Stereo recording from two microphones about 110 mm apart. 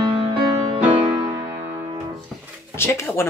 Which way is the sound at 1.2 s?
30° right (ahead or behind).